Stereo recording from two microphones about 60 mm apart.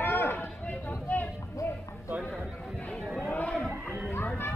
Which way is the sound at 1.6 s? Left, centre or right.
Left.